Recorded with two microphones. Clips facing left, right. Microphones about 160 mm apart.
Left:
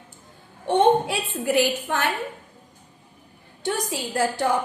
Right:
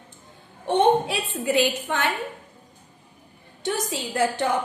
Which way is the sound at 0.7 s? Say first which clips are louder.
Left 1 dB; 20° right (ahead or behind).